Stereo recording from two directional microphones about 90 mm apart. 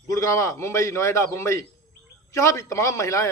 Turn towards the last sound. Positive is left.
turn(degrees=35)  # may be behind; listen again after turning